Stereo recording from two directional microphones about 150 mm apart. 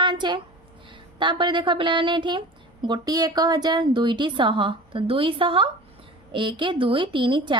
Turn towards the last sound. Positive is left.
turn(degrees=-30)  # may be behind; listen again after turning